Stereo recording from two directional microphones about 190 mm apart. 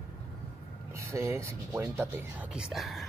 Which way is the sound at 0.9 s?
15° right (ahead or behind).